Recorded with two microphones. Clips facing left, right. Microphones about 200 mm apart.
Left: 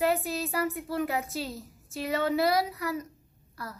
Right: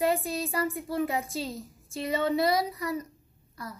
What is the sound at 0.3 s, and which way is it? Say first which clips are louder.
Speech: even; 5° left (ahead or behind).